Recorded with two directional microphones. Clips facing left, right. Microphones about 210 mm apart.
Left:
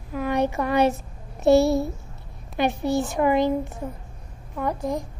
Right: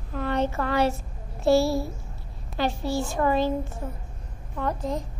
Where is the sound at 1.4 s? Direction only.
20° left (ahead or behind).